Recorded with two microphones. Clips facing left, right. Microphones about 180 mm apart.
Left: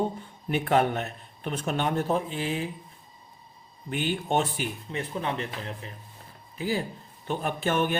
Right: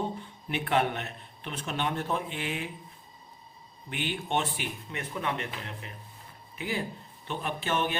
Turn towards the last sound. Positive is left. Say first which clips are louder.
# left 4 dB
turn(degrees=50)  # may be behind; listen again after turning